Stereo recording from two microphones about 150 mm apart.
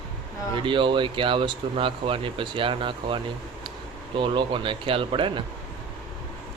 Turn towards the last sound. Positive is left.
turn(degrees=-35)  # may be behind; listen again after turning